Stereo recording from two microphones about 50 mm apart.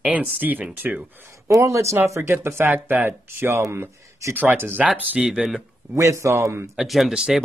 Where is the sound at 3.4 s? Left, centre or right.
Right.